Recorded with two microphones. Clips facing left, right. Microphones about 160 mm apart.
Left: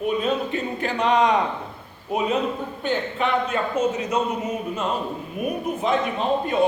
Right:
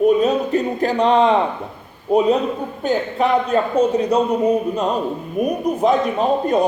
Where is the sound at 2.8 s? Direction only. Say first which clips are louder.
Right 6 dB; 40° right (ahead or behind).